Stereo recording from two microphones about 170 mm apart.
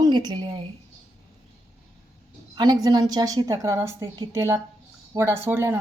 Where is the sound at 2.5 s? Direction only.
25° right (ahead or behind).